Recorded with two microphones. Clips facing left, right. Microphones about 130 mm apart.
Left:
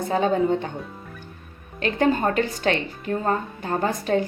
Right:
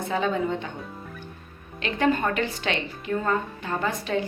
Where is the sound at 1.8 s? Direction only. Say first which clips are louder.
Left 3 dB; 35° left (ahead or behind).